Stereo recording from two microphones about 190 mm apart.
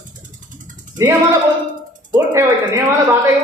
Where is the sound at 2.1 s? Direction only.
20° right (ahead or behind).